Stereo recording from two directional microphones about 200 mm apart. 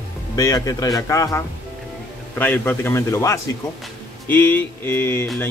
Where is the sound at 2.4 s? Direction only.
10° left (ahead or behind).